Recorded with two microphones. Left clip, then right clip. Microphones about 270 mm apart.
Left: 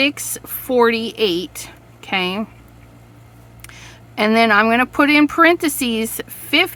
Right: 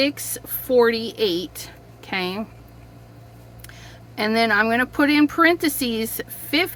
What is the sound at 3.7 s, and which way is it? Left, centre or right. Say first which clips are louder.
Speech: left 5 dB; left.